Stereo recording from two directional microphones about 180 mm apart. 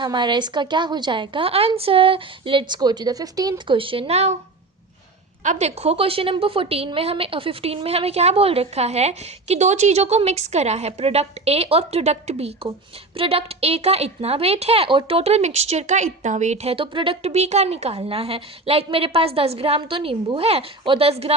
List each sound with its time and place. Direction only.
0.0 s a woman's voice: 25° right (ahead or behind)
5.4 s a woman's voice: 40° right (ahead or behind)